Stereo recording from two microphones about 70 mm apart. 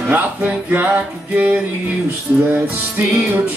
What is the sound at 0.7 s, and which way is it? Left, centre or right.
Music, right.